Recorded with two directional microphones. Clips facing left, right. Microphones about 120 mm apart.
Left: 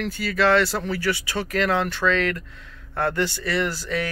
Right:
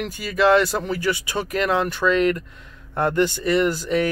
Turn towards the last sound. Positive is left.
turn(degrees=-20)  # may be behind; listen again after turning